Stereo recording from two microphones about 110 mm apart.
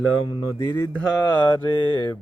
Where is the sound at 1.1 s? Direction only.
40° left (ahead or behind).